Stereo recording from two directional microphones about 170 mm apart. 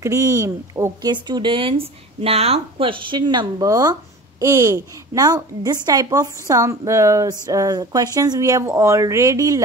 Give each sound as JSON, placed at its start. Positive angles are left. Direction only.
{"t": 0.0, "sound": "a child's voice", "side_deg": -15}